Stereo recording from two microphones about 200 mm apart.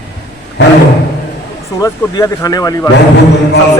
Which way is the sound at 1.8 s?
15° left (ahead or behind).